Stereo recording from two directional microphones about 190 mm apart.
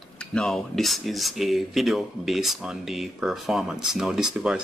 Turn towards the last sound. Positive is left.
turn(degrees=-5)  # may be behind; listen again after turning